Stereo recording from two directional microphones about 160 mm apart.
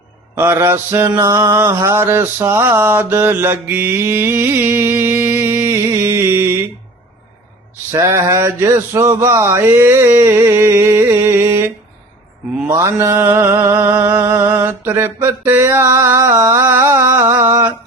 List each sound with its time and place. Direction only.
0.3 s mantra: 15° right (ahead or behind)
7.9 s mantra: 15° right (ahead or behind)
17.5 s a sound: 15° right (ahead or behind)